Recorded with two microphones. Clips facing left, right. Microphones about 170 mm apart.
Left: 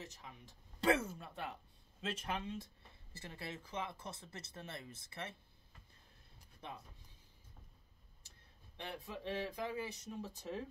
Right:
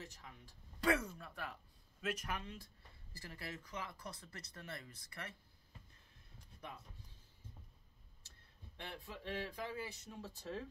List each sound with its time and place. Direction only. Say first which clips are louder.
0.0 s speech: left 2 dB; 20° left (ahead or behind)
8.7 s speech: left 3 dB; 20° left (ahead or behind)